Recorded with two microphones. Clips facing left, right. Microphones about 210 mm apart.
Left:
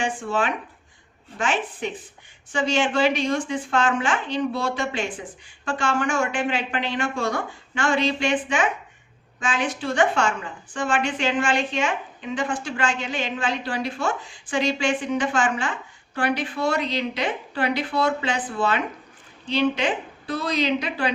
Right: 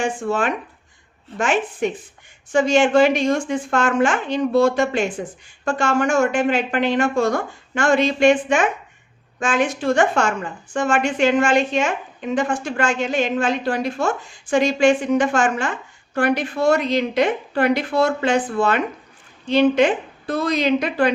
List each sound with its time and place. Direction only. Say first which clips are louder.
0.0 s a woman's voice: right 4 dB; 45° right (ahead or behind)